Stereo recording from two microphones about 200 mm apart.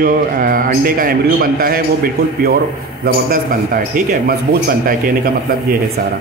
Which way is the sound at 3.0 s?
45° right (ahead or behind).